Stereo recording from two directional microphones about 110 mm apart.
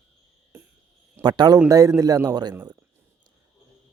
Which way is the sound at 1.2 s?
20° right (ahead or behind).